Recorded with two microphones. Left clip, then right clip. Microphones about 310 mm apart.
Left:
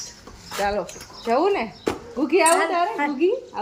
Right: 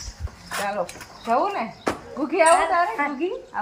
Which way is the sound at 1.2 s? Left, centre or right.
Centre.